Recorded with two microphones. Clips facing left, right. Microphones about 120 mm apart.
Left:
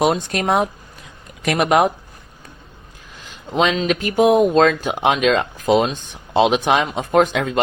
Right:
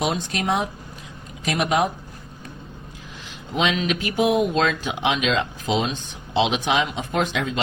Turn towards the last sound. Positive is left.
turn(degrees=50)  # may be behind; listen again after turning